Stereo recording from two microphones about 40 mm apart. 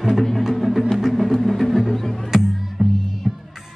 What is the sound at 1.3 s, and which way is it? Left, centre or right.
Music, centre.